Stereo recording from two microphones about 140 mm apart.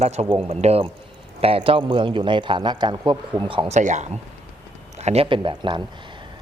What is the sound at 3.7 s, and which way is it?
Speech, 60° right (ahead or behind).